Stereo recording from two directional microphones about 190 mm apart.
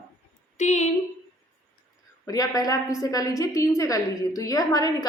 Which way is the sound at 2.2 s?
20° left (ahead or behind).